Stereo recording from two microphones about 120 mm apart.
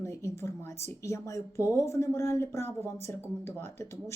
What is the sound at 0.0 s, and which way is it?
Speech, 20° left (ahead or behind).